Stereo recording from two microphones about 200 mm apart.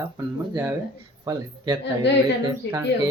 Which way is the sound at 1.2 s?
20° right (ahead or behind).